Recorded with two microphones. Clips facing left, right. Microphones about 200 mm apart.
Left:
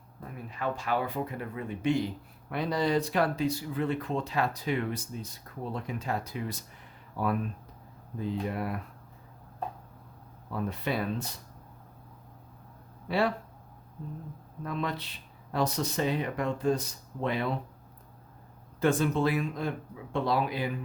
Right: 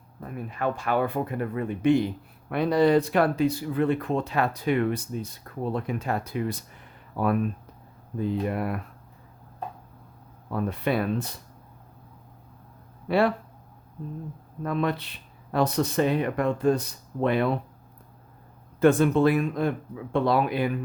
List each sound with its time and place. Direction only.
0.2 s speech: 55° right (ahead or behind)
10.5 s speech: 60° right (ahead or behind)
13.1 s speech: 60° right (ahead or behind)
14.6 s speech: 60° right (ahead or behind)
18.8 s speech: 60° right (ahead or behind)